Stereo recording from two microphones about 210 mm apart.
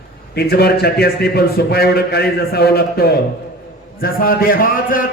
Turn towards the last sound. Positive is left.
turn(degrees=40)  # may be behind; listen again after turning